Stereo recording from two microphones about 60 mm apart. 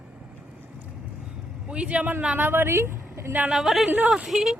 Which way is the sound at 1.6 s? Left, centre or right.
Right.